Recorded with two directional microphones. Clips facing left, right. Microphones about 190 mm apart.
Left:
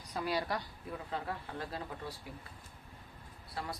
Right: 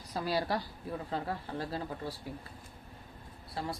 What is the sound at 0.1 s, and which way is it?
Speech, 35° right (ahead or behind).